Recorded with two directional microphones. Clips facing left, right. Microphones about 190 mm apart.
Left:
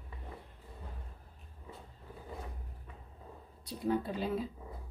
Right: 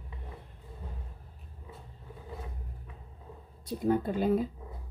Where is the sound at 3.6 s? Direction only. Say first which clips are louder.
Right 5 dB; 50° right (ahead or behind).